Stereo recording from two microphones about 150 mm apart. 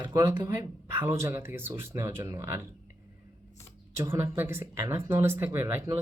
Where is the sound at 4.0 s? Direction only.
15° right (ahead or behind).